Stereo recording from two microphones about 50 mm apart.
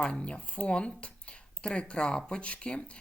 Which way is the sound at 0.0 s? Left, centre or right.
Left.